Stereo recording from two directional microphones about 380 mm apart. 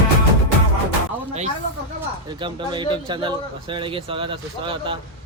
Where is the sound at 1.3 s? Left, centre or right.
Centre.